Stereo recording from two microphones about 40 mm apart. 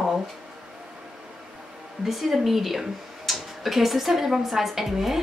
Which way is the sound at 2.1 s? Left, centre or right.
Centre.